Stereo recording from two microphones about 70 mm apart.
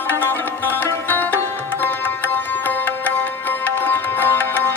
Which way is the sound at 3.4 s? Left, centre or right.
Left.